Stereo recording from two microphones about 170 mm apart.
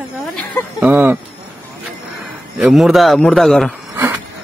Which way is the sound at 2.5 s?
Centre (ahead or behind).